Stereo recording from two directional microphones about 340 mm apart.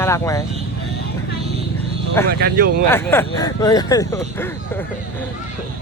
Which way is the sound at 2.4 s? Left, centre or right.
Right.